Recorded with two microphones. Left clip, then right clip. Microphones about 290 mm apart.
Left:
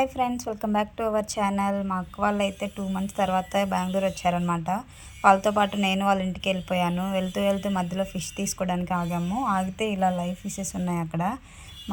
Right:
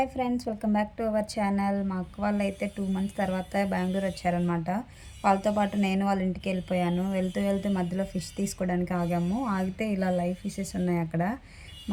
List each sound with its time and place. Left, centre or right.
0.0 s a woman's voice: left